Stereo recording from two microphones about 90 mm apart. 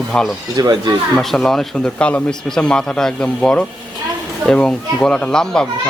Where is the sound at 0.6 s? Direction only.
50° right (ahead or behind).